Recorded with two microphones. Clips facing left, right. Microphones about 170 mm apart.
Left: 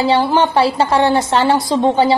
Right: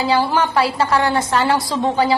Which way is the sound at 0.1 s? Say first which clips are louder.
Left 2 dB; 25° left (ahead or behind).